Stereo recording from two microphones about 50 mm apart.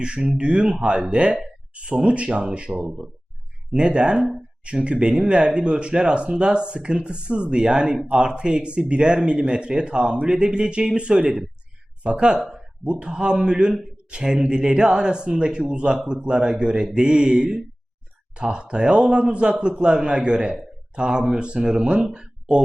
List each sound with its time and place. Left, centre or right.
0.0 s a man's voice: centre
12.5 s a sound: centre
12.9 s a man's voice: centre